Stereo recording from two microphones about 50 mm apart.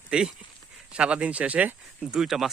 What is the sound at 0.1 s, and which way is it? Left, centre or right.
Speech, centre.